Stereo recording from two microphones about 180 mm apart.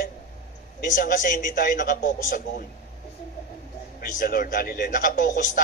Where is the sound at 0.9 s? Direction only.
50° left (ahead or behind).